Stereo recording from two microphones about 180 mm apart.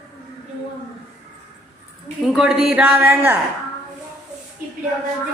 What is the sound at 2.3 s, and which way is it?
A woman's voice, 5° right (ahead or behind).